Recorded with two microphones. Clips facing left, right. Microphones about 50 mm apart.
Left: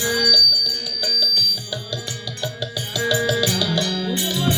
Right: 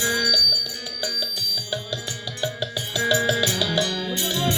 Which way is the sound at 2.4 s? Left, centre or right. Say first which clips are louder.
Right 1 dB; right.